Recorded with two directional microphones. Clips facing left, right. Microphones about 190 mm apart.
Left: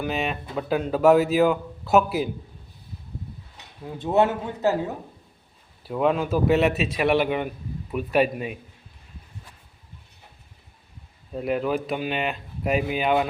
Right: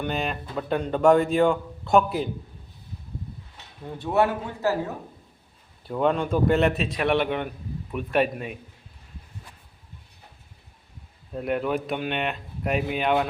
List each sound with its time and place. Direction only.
0.0 s a man's voice: centre (ahead or behind)
3.9 s a man's voice: 20° left (ahead or behind)
5.8 s a man's voice: 5° left (ahead or behind)
11.3 s a man's voice: centre (ahead or behind)